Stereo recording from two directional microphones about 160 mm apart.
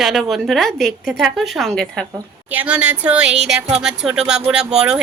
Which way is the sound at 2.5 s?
10° right (ahead or behind).